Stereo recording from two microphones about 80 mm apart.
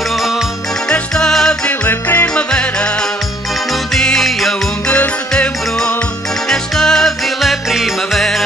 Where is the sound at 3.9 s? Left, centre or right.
Centre.